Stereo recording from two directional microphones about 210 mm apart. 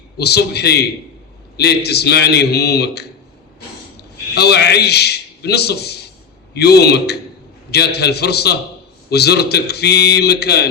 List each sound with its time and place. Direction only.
0.2 s a man's voice: 50° left (ahead or behind)
4.4 s a man's voice: 50° left (ahead or behind)